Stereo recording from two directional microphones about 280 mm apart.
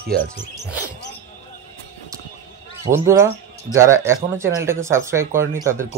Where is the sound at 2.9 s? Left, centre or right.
Centre.